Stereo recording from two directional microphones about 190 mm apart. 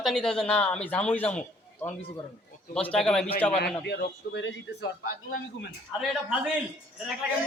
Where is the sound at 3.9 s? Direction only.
60° left (ahead or behind).